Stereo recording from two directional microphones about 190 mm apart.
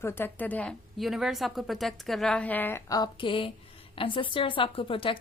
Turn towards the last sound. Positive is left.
turn(degrees=30)  # may be behind; listen again after turning